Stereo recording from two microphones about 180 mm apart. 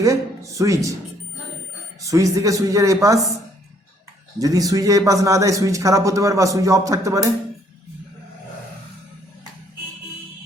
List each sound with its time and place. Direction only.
0.0 s speech: 15° right (ahead or behind)
2.0 s a man's voice: 20° right (ahead or behind)
4.4 s a man's voice: 20° right (ahead or behind)